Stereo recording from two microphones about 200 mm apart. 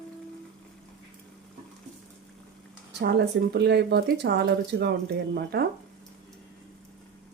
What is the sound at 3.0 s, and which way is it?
A woman's voice, 55° right (ahead or behind).